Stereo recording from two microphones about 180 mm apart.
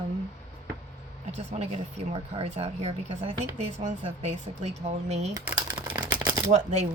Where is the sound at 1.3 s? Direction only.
40° right (ahead or behind).